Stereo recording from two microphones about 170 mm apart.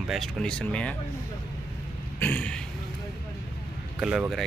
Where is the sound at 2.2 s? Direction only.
10° left (ahead or behind).